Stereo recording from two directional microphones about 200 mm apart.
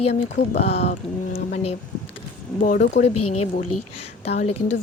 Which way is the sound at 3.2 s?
90° left.